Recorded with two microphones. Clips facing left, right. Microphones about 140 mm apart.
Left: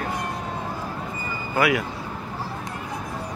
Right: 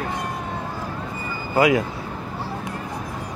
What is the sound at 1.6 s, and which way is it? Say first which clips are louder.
Vehicle: right 4 dB; 20° right (ahead or behind).